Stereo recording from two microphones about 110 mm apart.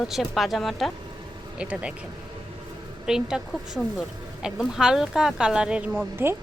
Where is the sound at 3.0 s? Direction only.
5° right (ahead or behind).